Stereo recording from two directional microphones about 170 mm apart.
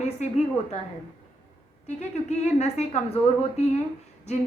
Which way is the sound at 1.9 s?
40° left (ahead or behind).